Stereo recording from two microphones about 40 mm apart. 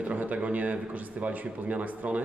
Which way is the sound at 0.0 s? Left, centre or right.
Right.